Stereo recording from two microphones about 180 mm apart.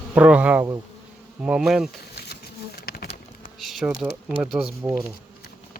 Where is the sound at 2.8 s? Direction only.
60° left (ahead or behind).